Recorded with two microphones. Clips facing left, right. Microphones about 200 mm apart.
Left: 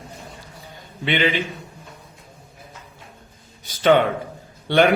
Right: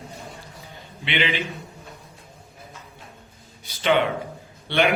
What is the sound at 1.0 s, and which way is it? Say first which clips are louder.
Speech: left 5 dB; 45° left (ahead or behind).